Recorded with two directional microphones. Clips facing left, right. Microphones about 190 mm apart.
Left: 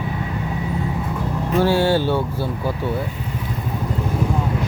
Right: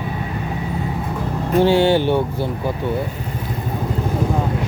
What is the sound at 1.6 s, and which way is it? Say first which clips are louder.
Speech: right 3 dB; 20° right (ahead or behind).